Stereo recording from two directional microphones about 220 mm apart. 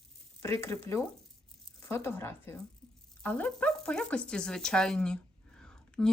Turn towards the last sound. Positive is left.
turn(degrees=5)  # may be behind; listen again after turning